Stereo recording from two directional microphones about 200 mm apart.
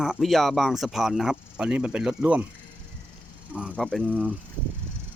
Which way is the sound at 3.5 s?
5° right (ahead or behind).